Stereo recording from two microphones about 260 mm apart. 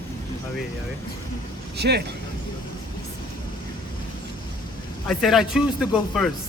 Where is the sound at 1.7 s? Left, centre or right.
Right.